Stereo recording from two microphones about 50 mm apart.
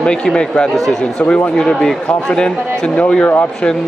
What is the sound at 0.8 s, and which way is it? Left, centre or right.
Speech, centre.